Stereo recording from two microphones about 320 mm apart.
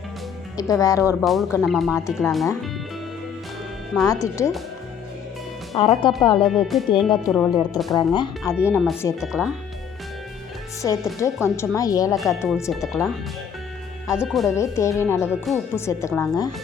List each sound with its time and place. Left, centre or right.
0.5 s speech: centre
3.9 s speech: centre
5.7 s speech: centre
6.4 s speech: centre
11.4 s speech: centre
12.1 s speech: centre
14.1 s speech: centre